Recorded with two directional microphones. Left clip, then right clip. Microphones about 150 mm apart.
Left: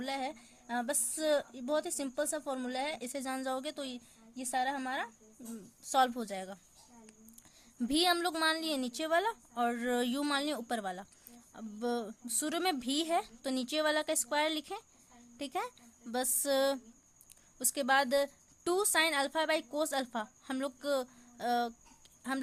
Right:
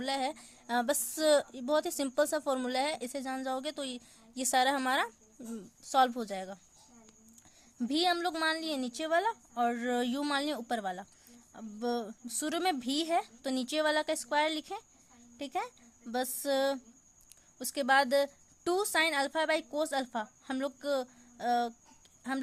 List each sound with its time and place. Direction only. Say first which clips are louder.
0.0 s a woman's voice: right 4 dB; 15° right (ahead or behind)
4.4 s a woman's voice: right 6 dB; 30° right (ahead or behind)
5.8 s a woman's voice: right 2 dB; 10° right (ahead or behind)
7.8 s a woman's voice: even; centre (ahead or behind)